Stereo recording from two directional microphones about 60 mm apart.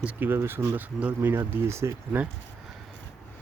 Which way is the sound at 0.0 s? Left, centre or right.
Right.